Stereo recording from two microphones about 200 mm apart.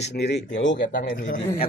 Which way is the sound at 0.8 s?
45° left (ahead or behind).